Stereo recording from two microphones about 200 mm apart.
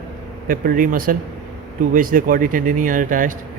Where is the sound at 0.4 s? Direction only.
45° right (ahead or behind).